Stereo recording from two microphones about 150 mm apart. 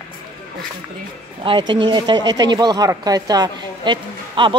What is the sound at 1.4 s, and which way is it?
Speech, 30° right (ahead or behind).